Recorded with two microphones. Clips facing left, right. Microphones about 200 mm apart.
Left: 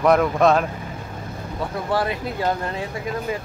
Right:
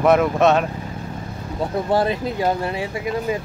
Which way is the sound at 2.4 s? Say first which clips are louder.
Right 2 dB; 10° right (ahead or behind).